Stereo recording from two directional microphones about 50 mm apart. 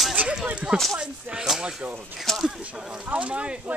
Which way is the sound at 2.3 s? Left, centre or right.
Centre.